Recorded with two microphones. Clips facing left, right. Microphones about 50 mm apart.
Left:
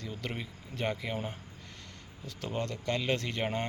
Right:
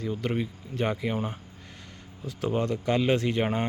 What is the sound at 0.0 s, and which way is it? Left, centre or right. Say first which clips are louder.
Speech: right 10 dB; centre.